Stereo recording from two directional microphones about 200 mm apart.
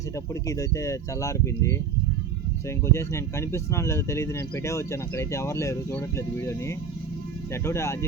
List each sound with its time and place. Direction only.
0.4 s speech: 15° left (ahead or behind)